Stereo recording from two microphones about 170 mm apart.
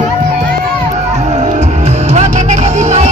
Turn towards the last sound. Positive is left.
turn(degrees=-40)  # may be behind; listen again after turning